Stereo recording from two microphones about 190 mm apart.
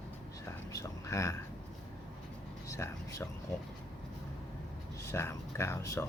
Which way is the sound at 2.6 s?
15° left (ahead or behind).